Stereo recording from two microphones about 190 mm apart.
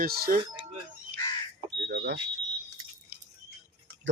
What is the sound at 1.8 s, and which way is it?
Smoke detector, 65° right (ahead or behind).